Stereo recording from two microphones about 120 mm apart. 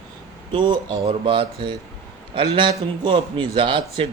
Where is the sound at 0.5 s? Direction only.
40° right (ahead or behind).